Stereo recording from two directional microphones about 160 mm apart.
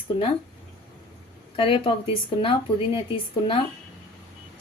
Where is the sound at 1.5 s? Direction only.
35° left (ahead or behind).